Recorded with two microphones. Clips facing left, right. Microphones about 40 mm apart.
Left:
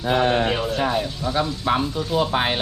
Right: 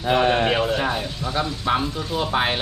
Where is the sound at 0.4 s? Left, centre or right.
Right.